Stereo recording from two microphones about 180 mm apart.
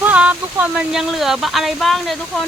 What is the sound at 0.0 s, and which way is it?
Speech, 5° right (ahead or behind).